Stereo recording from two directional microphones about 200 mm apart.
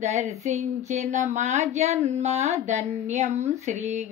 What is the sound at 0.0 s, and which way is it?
Speech, 35° right (ahead or behind).